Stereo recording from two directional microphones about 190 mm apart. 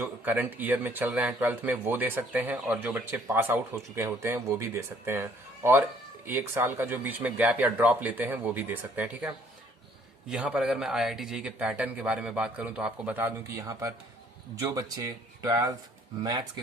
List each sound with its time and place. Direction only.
0.0 s a man's voice: 10° right (ahead or behind)